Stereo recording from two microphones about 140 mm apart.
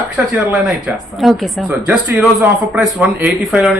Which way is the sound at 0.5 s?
5° right (ahead or behind).